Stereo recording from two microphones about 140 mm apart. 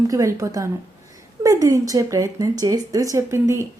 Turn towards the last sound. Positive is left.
turn(degrees=-20)  # may be behind; listen again after turning